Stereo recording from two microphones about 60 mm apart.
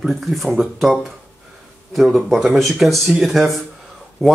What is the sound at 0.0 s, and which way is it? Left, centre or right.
Speech, centre.